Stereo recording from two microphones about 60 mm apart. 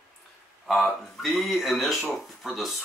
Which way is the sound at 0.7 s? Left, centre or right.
Centre.